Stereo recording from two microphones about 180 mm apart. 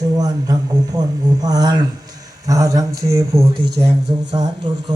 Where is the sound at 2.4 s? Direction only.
20° right (ahead or behind).